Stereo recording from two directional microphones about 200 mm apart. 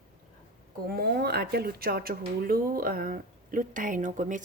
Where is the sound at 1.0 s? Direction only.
55° right (ahead or behind).